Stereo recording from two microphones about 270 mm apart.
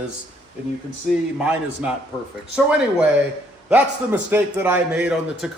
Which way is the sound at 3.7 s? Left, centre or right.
Centre.